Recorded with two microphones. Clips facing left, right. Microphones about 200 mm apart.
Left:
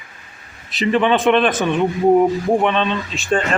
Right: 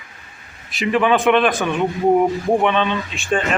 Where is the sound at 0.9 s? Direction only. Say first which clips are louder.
Even; 5° right (ahead or behind).